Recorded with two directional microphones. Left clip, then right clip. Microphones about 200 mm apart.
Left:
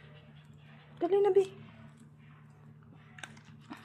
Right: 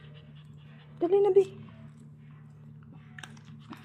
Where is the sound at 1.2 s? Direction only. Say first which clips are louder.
Right 4 dB; 45° left (ahead or behind).